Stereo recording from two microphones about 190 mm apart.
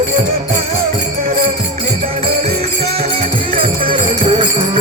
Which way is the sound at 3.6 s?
25° right (ahead or behind).